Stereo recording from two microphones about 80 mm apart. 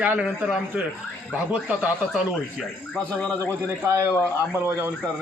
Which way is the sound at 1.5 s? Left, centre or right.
Centre.